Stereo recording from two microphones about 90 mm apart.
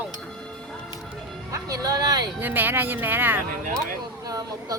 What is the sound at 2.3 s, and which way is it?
Speech, 20° right (ahead or behind).